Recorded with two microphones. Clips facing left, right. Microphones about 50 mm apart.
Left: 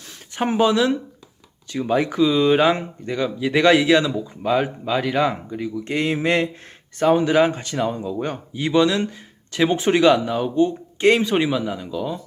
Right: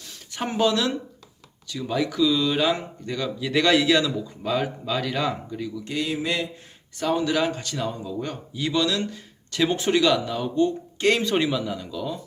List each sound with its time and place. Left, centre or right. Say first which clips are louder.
0.3 s speech: left 5 dB; left
1.6 s speech: left 5 dB; left
7.0 s speech: left 7 dB; left